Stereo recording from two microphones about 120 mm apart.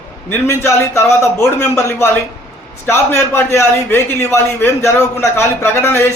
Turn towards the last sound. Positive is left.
turn(degrees=20)  # may be behind; listen again after turning